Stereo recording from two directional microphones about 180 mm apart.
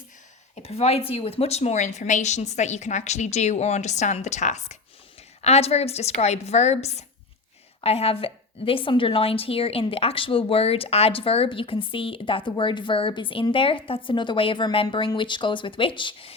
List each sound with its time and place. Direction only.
0.5 s a woman's voice: 35° left (ahead or behind)